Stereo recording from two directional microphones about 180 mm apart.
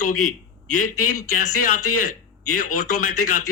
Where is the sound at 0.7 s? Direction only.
50° left (ahead or behind).